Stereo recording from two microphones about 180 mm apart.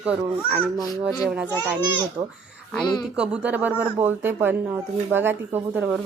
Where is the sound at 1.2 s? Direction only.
5° right (ahead or behind).